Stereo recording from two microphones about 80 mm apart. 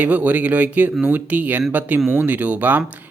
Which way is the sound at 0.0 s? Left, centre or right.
Centre.